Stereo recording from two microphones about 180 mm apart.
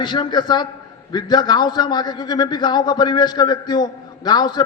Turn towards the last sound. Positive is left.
turn(degrees=25)  # may be behind; listen again after turning